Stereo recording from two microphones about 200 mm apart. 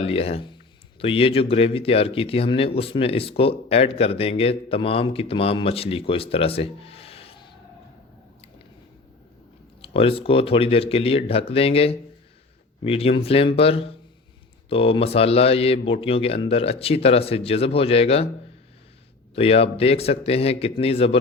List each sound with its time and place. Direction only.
0.0 s speech: 30° left (ahead or behind)
9.8 s speech: 30° left (ahead or behind)
19.4 s speech: 30° left (ahead or behind)